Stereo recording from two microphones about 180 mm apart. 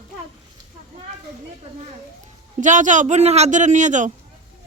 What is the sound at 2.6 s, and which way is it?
A man's voice, 45° right (ahead or behind).